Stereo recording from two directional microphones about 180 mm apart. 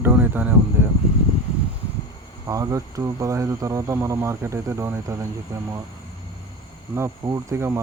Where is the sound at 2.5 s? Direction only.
20° right (ahead or behind).